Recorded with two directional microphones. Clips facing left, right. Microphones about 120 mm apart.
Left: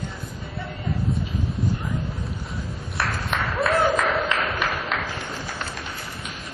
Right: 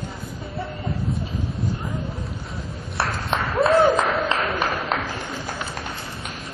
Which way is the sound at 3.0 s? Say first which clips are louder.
Right 2 dB; 30° right (ahead or behind).